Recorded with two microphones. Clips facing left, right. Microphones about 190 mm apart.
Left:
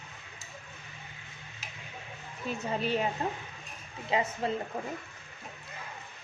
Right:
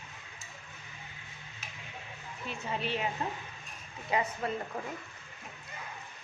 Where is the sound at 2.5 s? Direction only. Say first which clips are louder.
Left 4 dB; 40° left (ahead or behind).